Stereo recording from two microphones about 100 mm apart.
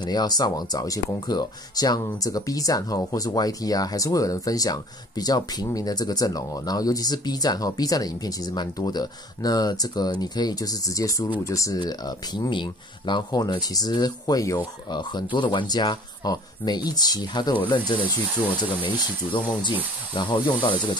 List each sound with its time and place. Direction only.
0.0 s speech: 45° left (ahead or behind)
12.4 s speech: 50° left (ahead or behind)
14.9 s speech: 50° left (ahead or behind)